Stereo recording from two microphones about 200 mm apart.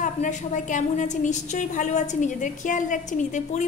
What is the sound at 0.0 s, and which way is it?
A woman's voice, 40° left (ahead or behind).